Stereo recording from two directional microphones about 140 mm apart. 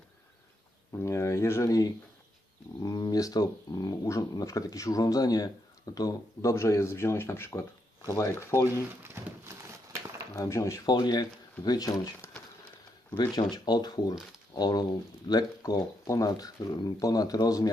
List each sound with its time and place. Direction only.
0.9 s speech: 20° left (ahead or behind)
9.1 s a sound: 20° right (ahead or behind)
10.3 s speech: 20° left (ahead or behind)
13.1 s speech: 35° left (ahead or behind)